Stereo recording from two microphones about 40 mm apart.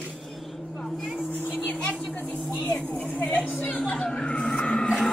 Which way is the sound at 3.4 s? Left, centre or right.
Left.